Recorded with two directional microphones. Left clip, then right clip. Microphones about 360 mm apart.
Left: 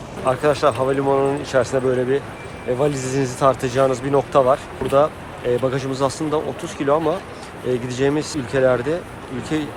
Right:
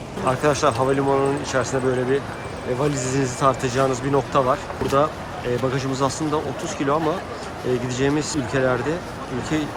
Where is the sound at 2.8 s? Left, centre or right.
Centre.